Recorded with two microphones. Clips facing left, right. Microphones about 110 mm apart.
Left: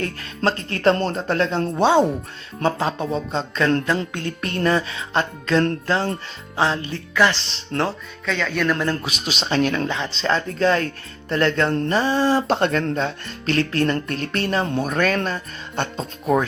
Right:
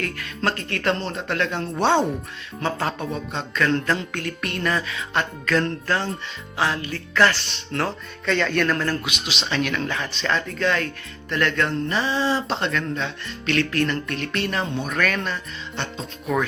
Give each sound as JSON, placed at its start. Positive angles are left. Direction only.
{"t": 0.0, "sound": "speech", "side_deg": 30}
{"t": 1.8, "sound": "speech", "side_deg": 10}
{"t": 2.7, "sound": "speech", "side_deg": 25}
{"t": 7.1, "sound": "speech", "side_deg": 15}
{"t": 7.3, "sound": "speech", "side_deg": 30}
{"t": 8.3, "sound": "a man's voice", "side_deg": 0}
{"t": 8.7, "sound": "speech", "side_deg": 15}
{"t": 9.0, "sound": "speech", "side_deg": 40}
{"t": 9.8, "sound": "speech", "side_deg": 25}
{"t": 11.9, "sound": "speech", "side_deg": 45}